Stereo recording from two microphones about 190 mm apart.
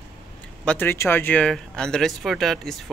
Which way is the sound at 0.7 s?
10° left (ahead or behind).